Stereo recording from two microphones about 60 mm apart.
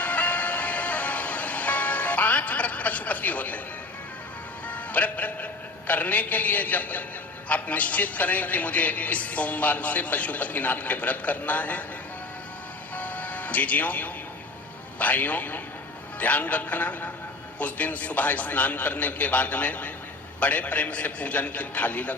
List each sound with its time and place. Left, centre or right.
0.0 s music: left
4.7 s a man's voice: left
13.0 s music: left
14.9 s a man's voice: left